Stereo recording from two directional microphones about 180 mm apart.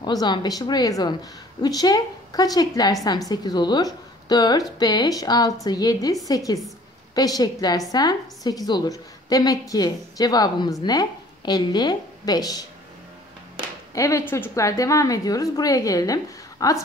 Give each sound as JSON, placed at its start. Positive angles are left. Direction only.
{"t": 0.0, "sound": "a woman's voice", "side_deg": 25}
{"t": 13.9, "sound": "a woman's voice", "side_deg": 15}